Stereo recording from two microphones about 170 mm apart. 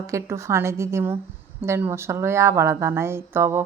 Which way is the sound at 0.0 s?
15° right (ahead or behind).